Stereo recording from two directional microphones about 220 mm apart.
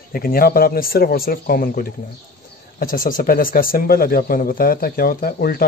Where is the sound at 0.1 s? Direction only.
40° left (ahead or behind).